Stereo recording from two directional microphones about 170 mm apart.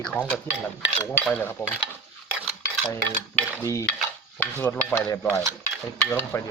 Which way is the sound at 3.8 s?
5° left (ahead or behind).